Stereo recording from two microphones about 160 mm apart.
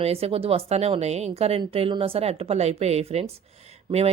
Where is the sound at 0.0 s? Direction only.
40° right (ahead or behind).